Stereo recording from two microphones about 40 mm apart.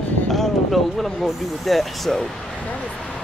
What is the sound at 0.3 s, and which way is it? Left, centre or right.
Speech, centre.